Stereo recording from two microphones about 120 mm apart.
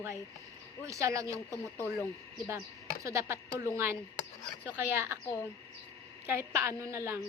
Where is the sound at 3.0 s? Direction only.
25° right (ahead or behind).